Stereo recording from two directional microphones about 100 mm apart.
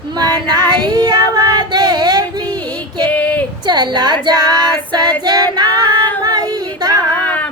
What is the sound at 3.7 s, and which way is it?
Female singing, 45° right (ahead or behind).